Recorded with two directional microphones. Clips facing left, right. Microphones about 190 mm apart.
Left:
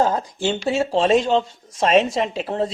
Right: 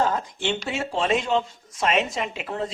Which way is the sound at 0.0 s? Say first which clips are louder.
Left 4 dB; 35° left (ahead or behind).